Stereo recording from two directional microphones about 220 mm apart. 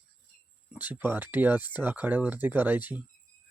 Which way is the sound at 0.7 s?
10° right (ahead or behind).